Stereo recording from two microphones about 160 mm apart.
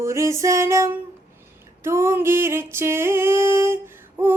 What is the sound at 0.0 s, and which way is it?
Music, 20° right (ahead or behind).